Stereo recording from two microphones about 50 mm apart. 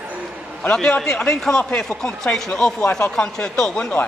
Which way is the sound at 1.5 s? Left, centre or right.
Centre.